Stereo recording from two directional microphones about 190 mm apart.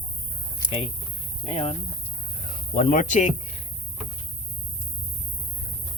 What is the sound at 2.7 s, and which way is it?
Speech, 45° left (ahead or behind).